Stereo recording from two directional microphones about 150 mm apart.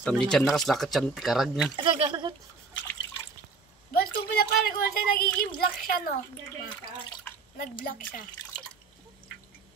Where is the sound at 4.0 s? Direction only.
85° left.